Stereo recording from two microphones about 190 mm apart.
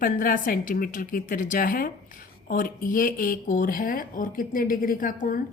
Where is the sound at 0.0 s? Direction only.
45° left (ahead or behind).